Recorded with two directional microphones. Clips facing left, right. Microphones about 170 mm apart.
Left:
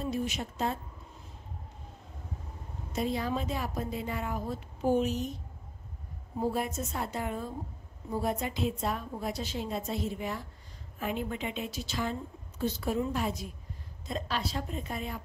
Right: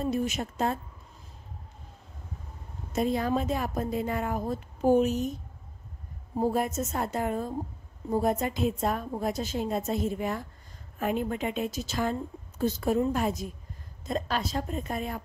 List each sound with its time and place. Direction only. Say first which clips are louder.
0.0 s a woman's voice: right 4 dB; 50° right (ahead or behind)
2.9 s a woman's voice: right 5 dB; 50° right (ahead or behind)
6.5 s a woman's voice: right 5 dB; 45° right (ahead or behind)